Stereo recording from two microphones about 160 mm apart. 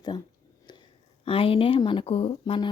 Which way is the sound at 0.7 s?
30° left (ahead or behind).